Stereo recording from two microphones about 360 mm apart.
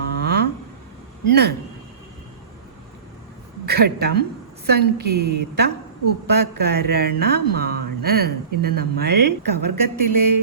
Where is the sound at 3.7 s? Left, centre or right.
Right.